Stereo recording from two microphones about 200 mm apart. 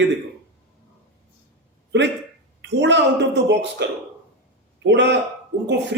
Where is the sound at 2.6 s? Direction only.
60° right (ahead or behind).